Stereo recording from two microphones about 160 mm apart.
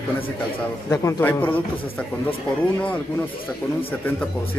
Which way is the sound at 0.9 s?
15° left (ahead or behind).